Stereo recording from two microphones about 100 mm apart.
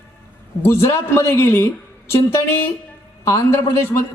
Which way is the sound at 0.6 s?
25° left (ahead or behind).